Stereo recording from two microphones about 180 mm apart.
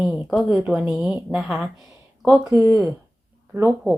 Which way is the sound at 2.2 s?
15° right (ahead or behind).